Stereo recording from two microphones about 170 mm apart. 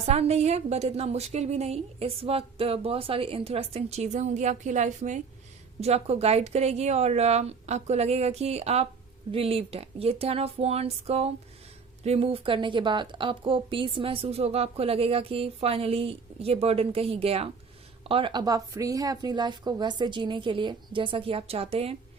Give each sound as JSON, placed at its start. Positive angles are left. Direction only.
{"t": 0.1, "sound": "a woman's voice", "side_deg": -40}